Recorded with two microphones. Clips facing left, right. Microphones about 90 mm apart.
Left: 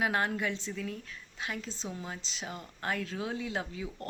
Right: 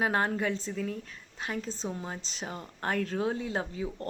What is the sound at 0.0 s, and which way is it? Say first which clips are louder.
A woman's voice: right 2 dB; 35° right (ahead or behind).